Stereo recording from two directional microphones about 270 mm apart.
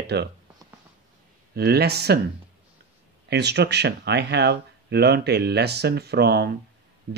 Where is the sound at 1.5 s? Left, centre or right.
Right.